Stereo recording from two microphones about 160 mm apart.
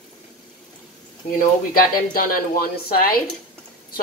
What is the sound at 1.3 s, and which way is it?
Speech, 65° left (ahead or behind).